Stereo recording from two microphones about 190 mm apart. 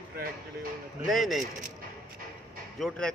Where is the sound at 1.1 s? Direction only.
Centre (ahead or behind).